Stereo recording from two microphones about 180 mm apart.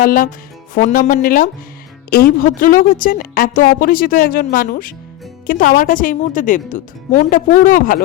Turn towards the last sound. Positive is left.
turn(degrees=50)  # may be behind; listen again after turning